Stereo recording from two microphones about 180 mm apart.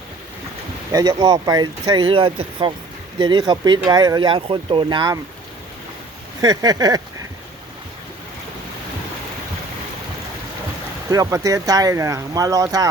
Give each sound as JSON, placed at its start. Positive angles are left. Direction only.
{"t": 0.9, "sound": "speech", "side_deg": -20}
{"t": 6.4, "sound": "speech", "side_deg": -20}
{"t": 11.1, "sound": "speech", "side_deg": -20}